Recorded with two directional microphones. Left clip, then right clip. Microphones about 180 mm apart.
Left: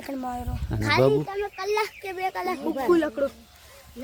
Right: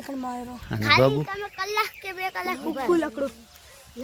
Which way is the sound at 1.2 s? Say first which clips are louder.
Left 2 dB; 30° left (ahead or behind).